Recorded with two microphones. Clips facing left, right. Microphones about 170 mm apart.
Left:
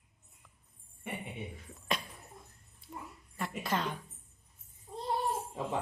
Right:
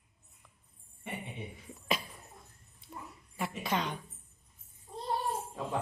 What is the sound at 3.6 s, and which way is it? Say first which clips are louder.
Speech: even; centre (ahead or behind).